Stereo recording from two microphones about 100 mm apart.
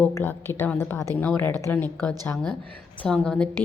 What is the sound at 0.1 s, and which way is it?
A woman's voice, 20° left (ahead or behind).